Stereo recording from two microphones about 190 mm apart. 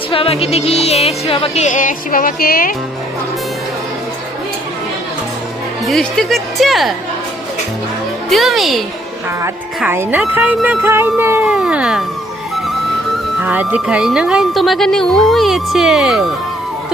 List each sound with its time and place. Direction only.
0.1 s music: 30° left (ahead or behind); by 2.7 s 50° left (ahead or behind)
5.8 s speech: centre (ahead or behind)
8.3 s speech: centre (ahead or behind)
9.4 s a woman's voice: 15° right (ahead or behind)
13.4 s speech: 10° right (ahead or behind)